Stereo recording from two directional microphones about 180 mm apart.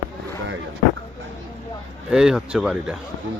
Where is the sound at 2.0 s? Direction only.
5° right (ahead or behind).